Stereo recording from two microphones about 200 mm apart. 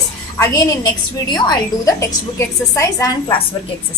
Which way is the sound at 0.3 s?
15° left (ahead or behind).